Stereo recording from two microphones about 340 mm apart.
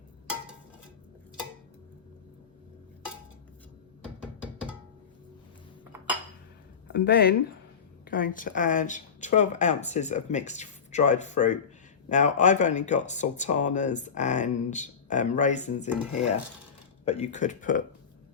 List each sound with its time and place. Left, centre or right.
6.9 s speech: left
17.1 s speech: centre